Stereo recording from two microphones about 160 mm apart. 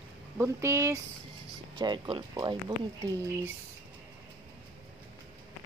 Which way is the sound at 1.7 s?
30° right (ahead or behind).